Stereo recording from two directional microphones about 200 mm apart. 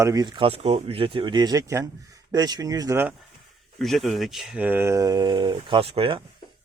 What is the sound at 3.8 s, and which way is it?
Speech, centre (ahead or behind).